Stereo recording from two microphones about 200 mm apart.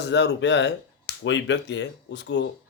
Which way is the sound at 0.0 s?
60° left (ahead or behind).